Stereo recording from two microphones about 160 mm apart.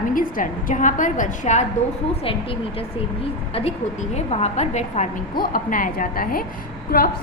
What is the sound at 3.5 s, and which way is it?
A woman's voice, 40° left (ahead or behind).